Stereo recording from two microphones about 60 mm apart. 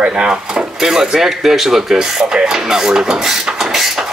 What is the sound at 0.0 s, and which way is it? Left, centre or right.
Speech, centre.